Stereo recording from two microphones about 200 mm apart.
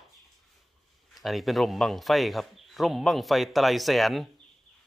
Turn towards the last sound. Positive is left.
turn(degrees=0)  # may be behind; listen again after turning